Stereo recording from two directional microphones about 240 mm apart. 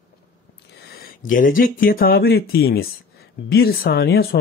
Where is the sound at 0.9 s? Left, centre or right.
Left.